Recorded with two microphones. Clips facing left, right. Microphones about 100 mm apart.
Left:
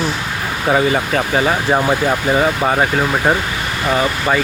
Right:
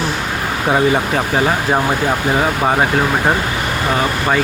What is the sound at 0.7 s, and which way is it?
Speech, centre (ahead or behind).